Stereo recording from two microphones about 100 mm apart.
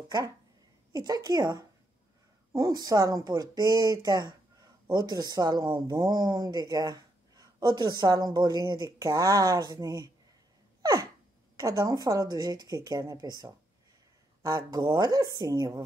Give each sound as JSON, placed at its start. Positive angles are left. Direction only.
{"t": 0.9, "sound": "a woman's voice", "side_deg": -40}
{"t": 10.8, "sound": "a sound", "side_deg": -35}
{"t": 11.6, "sound": "a woman's voice", "side_deg": -35}